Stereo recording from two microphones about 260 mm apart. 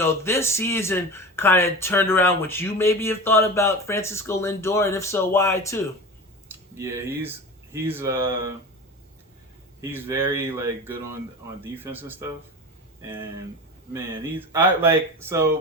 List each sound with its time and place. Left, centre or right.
0.0 s speech: centre
6.7 s speech: centre
9.8 s speech: centre